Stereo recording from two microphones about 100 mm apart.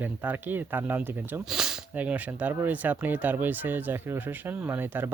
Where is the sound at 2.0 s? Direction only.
15° right (ahead or behind).